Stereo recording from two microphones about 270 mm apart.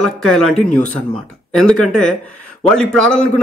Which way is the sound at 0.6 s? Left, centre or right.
Left.